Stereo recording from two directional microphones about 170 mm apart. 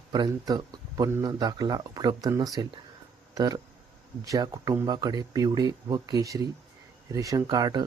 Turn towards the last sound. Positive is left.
turn(degrees=-25)  # may be behind; listen again after turning